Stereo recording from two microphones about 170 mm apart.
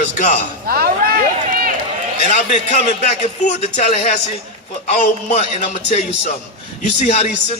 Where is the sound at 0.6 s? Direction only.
65° right (ahead or behind).